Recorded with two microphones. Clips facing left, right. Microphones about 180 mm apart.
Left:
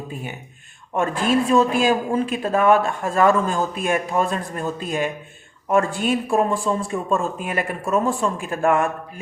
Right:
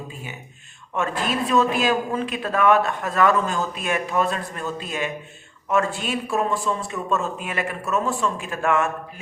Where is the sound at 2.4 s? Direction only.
30° left (ahead or behind).